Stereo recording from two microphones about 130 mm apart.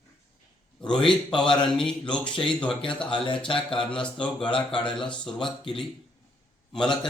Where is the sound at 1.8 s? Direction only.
5° left (ahead or behind).